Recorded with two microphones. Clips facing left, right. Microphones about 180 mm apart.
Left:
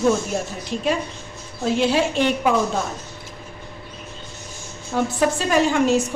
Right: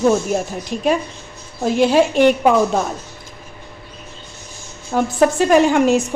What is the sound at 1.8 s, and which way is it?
Speech, 50° right (ahead or behind).